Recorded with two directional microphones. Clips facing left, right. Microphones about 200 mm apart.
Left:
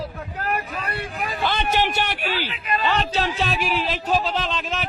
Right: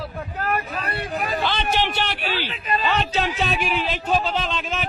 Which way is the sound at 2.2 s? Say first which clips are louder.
Even; 40° right (ahead or behind).